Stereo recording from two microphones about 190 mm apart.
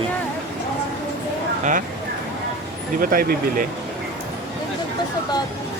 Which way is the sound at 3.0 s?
50° right (ahead or behind).